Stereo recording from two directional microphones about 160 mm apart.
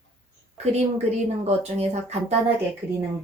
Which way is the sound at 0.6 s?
45° right (ahead or behind).